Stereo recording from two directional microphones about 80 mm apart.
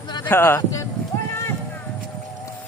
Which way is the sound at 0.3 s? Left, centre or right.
Left.